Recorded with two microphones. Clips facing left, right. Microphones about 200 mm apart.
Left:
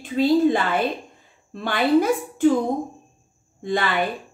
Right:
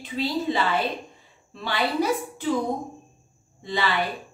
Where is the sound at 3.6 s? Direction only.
50° left (ahead or behind).